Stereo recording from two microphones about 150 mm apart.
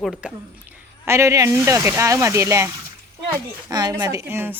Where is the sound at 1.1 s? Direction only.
20° right (ahead or behind).